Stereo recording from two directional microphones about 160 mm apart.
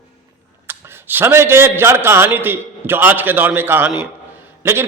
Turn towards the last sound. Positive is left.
turn(degrees=-15)  # may be behind; listen again after turning